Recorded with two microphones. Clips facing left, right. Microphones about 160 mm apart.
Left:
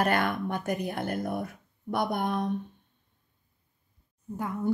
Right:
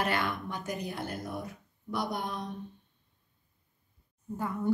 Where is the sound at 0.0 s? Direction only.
50° left (ahead or behind).